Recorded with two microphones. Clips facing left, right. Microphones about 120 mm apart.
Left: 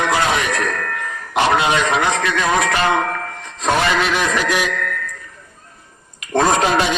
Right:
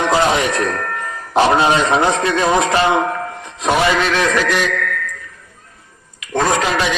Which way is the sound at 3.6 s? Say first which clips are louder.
Right 2 dB; centre (ahead or behind).